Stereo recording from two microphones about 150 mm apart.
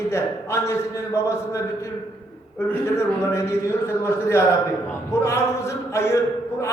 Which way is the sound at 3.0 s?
20° left (ahead or behind).